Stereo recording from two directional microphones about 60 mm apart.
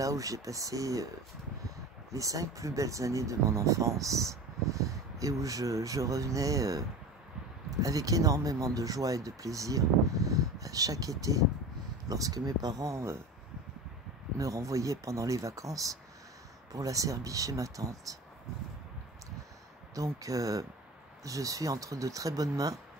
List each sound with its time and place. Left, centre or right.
0.0 s speech: right
2.1 s speech: right
12.1 s speech: right
14.4 s speech: right
19.9 s speech: right